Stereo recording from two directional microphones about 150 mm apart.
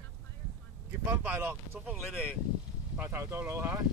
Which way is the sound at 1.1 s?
15° right (ahead or behind).